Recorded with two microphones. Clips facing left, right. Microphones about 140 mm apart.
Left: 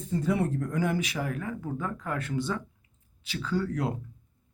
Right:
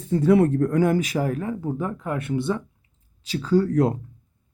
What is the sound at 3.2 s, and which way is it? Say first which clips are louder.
Speech: right 9 dB; 40° right (ahead or behind).